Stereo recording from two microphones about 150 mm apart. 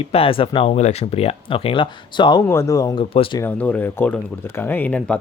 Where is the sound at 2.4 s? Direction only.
20° left (ahead or behind).